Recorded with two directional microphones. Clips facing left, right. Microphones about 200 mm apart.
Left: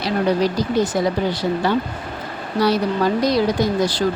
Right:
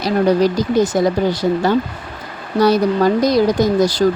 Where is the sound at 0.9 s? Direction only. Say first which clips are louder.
Right 4 dB; 45° right (ahead or behind).